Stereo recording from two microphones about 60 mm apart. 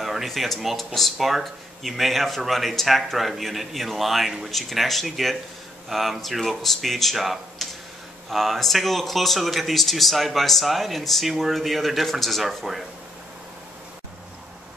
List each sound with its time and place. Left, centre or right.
0.0 s speech: centre